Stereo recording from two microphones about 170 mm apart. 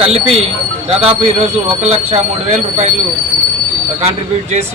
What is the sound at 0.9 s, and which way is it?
Speech, 35° right (ahead or behind).